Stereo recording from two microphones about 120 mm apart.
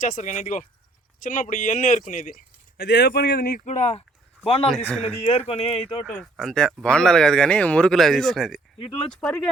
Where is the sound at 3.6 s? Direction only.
75° left (ahead or behind).